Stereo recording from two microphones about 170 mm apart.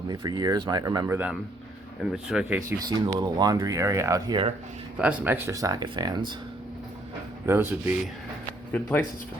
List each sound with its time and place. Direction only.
0.1 s speech: 25° right (ahead or behind)
1.0 s speech: 10° right (ahead or behind)
2.6 s speech: 20° right (ahead or behind)
4.9 s speech: 5° right (ahead or behind); by 6.3 s 25° right (ahead or behind)
7.4 s speech: 15° right (ahead or behind)